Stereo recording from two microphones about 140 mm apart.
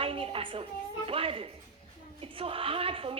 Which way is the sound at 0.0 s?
40° right (ahead or behind).